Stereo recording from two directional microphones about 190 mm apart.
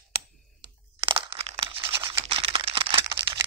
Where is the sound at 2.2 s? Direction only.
30° right (ahead or behind).